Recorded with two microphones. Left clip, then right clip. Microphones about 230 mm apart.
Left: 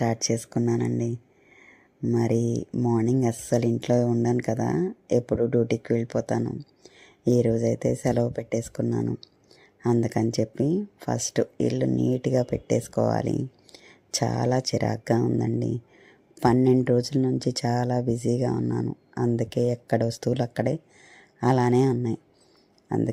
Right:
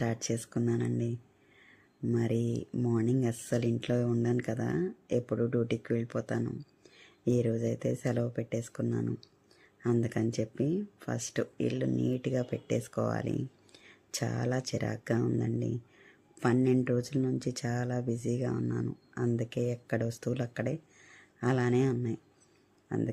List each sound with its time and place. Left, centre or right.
0.0 s speech: centre